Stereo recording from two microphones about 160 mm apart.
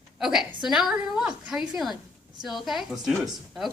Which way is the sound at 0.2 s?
5° right (ahead or behind).